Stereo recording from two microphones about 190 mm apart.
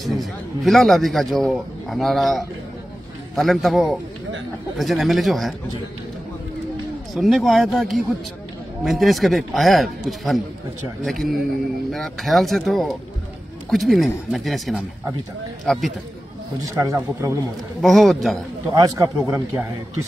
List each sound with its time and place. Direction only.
0.0 s a man's voice: centre (ahead or behind)
7.2 s a man's voice: centre (ahead or behind)
16.6 s speech: 15° right (ahead or behind)
17.8 s a man's voice: centre (ahead or behind)
18.7 s speech: 15° right (ahead or behind)